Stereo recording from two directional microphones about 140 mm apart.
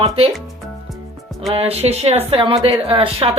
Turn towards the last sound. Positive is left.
turn(degrees=-40)  # may be behind; listen again after turning